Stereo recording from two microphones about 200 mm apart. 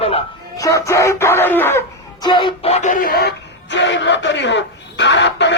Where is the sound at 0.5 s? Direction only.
15° left (ahead or behind).